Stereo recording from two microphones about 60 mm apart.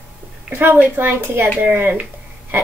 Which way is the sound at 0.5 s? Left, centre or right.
Right.